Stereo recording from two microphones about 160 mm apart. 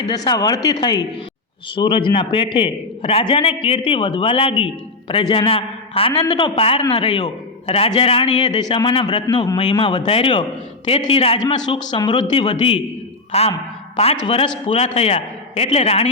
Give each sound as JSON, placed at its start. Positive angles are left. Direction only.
{"t": 0.1, "sound": "a man's voice", "side_deg": 25}
{"t": 13.3, "sound": "a man's voice", "side_deg": 40}